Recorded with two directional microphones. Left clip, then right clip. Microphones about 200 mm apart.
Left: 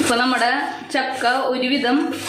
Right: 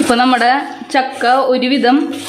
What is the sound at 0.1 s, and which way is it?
A woman's voice, 50° right (ahead or behind).